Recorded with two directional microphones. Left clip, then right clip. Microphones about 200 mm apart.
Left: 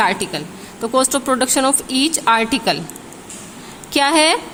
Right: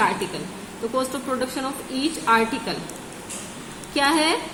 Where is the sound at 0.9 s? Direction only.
50° left (ahead or behind).